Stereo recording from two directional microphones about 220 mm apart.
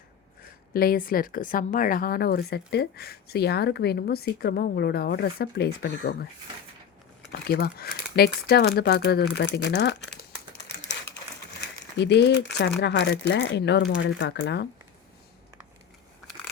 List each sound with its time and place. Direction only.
0.7 s a woman's voice: 45° left (ahead or behind)
7.3 s a woman's voice: 45° left (ahead or behind)
10.8 s typewriter: 50° left (ahead or behind)
11.9 s a woman's voice: 50° left (ahead or behind)